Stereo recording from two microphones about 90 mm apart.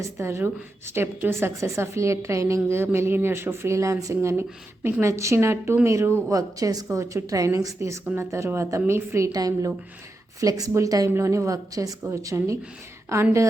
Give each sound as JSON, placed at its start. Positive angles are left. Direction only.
{"t": 0.0, "sound": "a woman's voice", "side_deg": -35}